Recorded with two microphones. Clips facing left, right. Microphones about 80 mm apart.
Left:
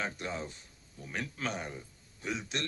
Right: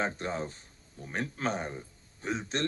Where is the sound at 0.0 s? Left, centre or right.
Right.